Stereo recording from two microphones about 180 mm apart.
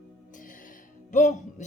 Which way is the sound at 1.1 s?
45° left (ahead or behind).